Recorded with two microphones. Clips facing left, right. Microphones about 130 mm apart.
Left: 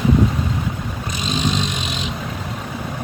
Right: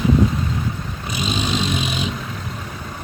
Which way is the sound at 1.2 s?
5° right (ahead or behind).